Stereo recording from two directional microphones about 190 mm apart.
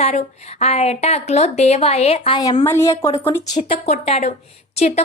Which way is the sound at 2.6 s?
15° left (ahead or behind).